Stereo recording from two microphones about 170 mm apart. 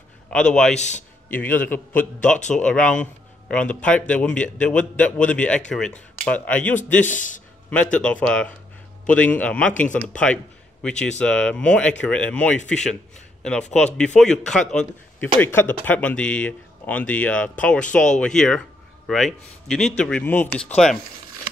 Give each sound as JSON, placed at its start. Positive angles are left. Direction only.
{"t": 0.3, "sound": "speech", "side_deg": 5}
{"t": 0.7, "sound": "a man's voice", "side_deg": 40}
{"t": 1.3, "sound": "a man's voice", "side_deg": 10}
{"t": 7.2, "sound": "a man's voice", "side_deg": 50}
{"t": 7.7, "sound": "a man's voice", "side_deg": 5}